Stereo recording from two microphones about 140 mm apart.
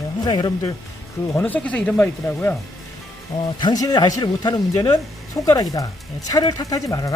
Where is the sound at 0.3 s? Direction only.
30° left (ahead or behind).